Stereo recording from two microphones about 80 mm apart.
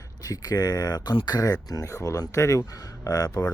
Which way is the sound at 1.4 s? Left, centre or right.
Left.